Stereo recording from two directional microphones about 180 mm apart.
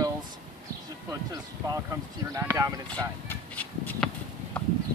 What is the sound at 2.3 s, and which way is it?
Speech, 15° right (ahead or behind).